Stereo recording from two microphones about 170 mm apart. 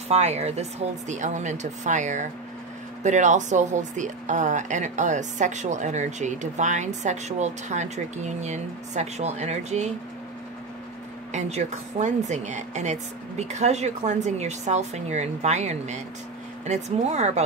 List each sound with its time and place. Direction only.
0.1 s a woman's voice: 40° right (ahead or behind)
11.3 s a woman's voice: 45° right (ahead or behind)